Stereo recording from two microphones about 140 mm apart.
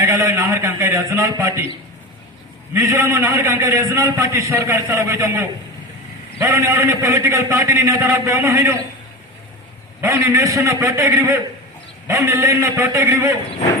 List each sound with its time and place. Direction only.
0.0 s a man's voice: 20° right (ahead or behind)
2.7 s a man's voice: 20° right (ahead or behind)
10.0 s a man's voice: 20° right (ahead or behind)